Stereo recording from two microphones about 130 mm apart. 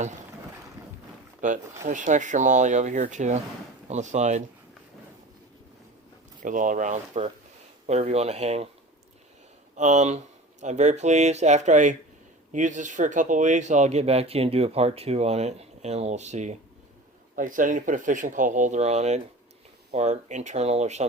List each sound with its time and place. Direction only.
1.4 s speech: 75° right (ahead or behind)
6.4 s speech: 90° right; by 8.7 s 55° right (ahead or behind)
9.7 s speech: 65° right (ahead or behind)
17.3 s speech: 90° right; by 21.0 s 60° right (ahead or behind)